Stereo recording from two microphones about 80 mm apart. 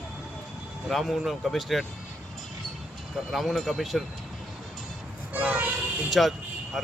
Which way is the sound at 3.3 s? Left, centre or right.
Centre.